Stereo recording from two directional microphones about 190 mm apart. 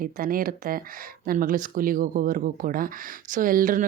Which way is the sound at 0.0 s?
50° right (ahead or behind).